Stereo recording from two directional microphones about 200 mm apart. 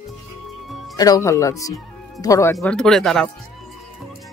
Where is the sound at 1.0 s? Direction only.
15° left (ahead or behind).